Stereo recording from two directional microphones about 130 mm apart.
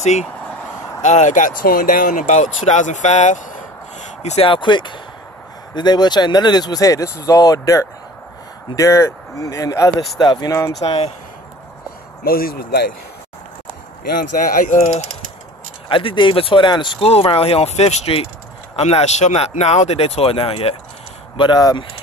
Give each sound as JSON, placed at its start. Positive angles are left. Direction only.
{"t": 0.0, "sound": "speech", "side_deg": 60}
{"t": 1.6, "sound": "speech", "side_deg": 90}
{"t": 4.5, "sound": "speech", "side_deg": 35}
{"t": 10.9, "sound": "speech", "side_deg": 50}
{"t": 14.1, "sound": "speech", "side_deg": 90}
{"t": 15.9, "sound": "speech", "side_deg": 40}
{"t": 21.4, "sound": "speech", "side_deg": 35}